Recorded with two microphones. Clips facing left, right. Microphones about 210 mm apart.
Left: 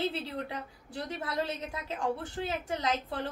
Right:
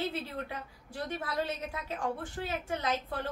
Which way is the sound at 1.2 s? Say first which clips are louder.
Left 2 dB; 25° left (ahead or behind).